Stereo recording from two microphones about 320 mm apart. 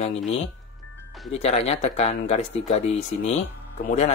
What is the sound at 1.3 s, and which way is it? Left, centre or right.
Speech, centre.